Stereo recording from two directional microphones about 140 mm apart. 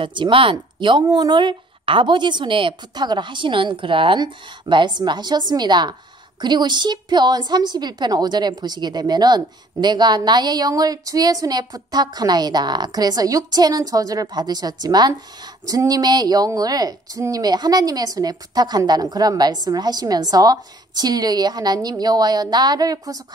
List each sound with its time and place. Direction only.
0.0 s a woman's voice: 35° right (ahead or behind)